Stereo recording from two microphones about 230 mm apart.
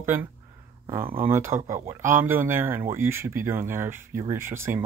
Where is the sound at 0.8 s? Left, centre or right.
Centre.